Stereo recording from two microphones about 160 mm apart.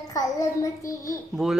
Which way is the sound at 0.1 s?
20° left (ahead or behind).